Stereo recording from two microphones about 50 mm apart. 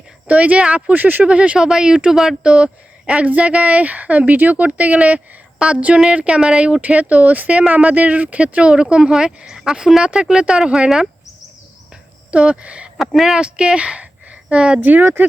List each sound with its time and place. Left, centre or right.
0.3 s speech: right
1.2 s speech: right
12.3 s speech: right
13.1 s speech: centre
13.4 s speech: centre
14.8 s speech: right